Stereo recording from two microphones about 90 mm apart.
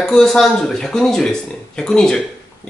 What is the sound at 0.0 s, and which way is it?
Speech, 5° left (ahead or behind).